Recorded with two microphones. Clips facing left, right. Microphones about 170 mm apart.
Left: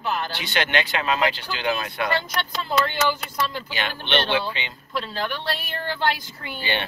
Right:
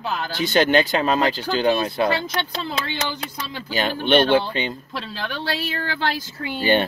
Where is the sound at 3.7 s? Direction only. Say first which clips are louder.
Right 10 dB; 40° right (ahead or behind).